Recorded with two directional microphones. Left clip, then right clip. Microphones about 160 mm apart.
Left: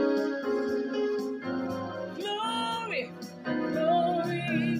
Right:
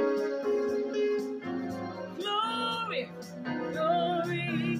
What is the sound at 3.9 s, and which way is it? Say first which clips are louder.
Music: left 2 dB; 10° left (ahead or behind).